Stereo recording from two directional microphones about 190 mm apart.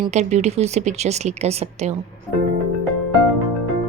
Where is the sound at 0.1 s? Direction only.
35° right (ahead or behind).